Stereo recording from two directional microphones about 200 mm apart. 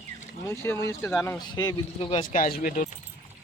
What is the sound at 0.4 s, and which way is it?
Speech, 15° left (ahead or behind).